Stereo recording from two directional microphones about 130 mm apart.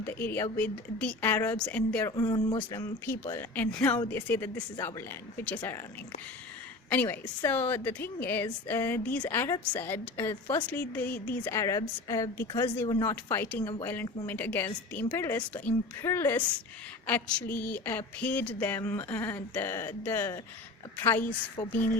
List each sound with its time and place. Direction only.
0.0 s a woman's voice: 15° left (ahead or behind)
2.0 s speech: 30° left (ahead or behind)
3.1 s a woman's voice: 20° left (ahead or behind)
6.9 s a woman's voice: 15° left (ahead or behind)